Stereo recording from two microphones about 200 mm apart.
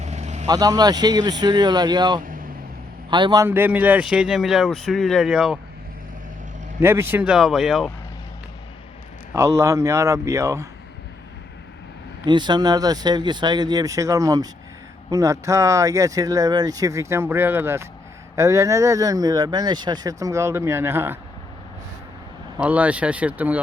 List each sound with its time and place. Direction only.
0.0 s vehicle: 35° right (ahead or behind)
0.4 s speech: 20° right (ahead or behind)
2.2 s vehicle: 45° right (ahead or behind)
3.1 s speech: 25° right (ahead or behind); by 5.5 s 5° right (ahead or behind)
6.7 s speech: 10° right (ahead or behind)
9.3 s speech: 15° right (ahead or behind)
12.2 s speech: 20° right (ahead or behind)
22.5 s speech: 5° right (ahead or behind)